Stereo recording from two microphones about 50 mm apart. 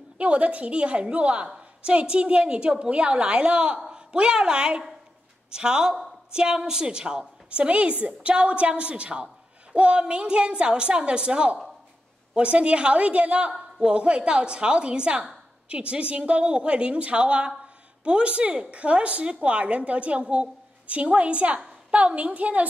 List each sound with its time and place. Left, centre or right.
0.2 s a woman's voice: right